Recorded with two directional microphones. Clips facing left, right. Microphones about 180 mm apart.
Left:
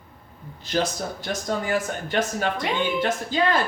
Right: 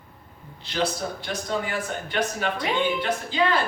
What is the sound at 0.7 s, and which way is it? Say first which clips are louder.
Speech: left 1 dB; 45° left (ahead or behind).